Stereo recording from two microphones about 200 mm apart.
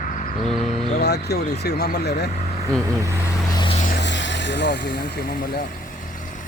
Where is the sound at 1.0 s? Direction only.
55° left (ahead or behind).